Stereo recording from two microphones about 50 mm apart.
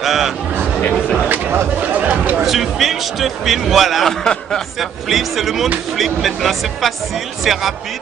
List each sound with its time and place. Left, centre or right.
0.0 s a sound: centre
1.8 s speech: right
2.4 s speech: centre
4.2 s speech: centre
4.7 s speech: centre